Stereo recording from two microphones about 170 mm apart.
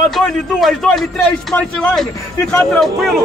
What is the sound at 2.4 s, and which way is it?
Speech, 15° left (ahead or behind).